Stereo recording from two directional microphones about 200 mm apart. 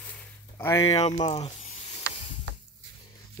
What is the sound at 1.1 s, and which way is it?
Speech, 20° left (ahead or behind).